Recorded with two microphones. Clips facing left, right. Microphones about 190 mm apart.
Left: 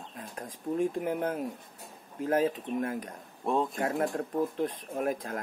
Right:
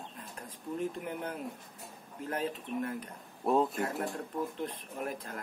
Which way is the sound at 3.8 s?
45° left (ahead or behind).